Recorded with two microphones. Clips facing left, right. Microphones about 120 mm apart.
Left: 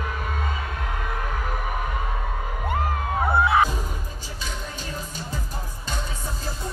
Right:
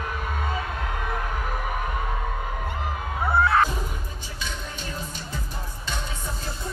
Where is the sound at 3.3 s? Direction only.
15° left (ahead or behind).